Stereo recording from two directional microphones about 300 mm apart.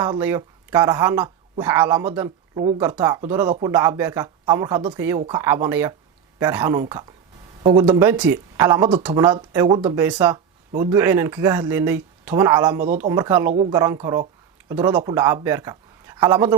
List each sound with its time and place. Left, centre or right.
0.0 s speech: centre